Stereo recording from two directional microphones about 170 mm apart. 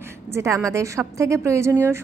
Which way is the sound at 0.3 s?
15° right (ahead or behind).